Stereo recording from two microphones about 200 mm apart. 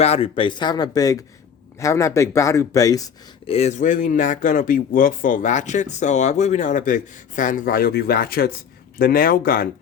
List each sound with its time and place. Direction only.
0.0 s speech: 30° left (ahead or behind)
3.5 s speech: 35° left (ahead or behind)